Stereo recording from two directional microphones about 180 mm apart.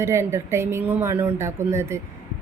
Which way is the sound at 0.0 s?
15° right (ahead or behind).